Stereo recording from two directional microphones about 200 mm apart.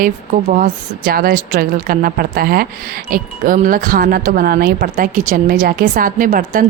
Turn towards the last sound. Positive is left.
turn(degrees=-45)  # may be behind; listen again after turning